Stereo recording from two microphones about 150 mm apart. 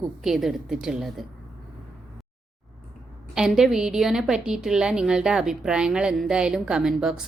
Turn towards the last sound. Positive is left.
turn(degrees=-5)  # may be behind; listen again after turning